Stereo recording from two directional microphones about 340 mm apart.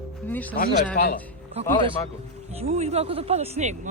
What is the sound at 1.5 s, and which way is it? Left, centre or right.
Speech, centre.